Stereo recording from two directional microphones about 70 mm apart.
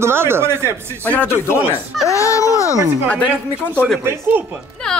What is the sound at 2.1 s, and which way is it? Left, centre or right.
Speech, left.